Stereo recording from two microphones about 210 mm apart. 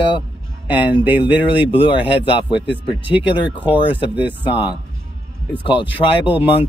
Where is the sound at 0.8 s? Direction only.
10° right (ahead or behind).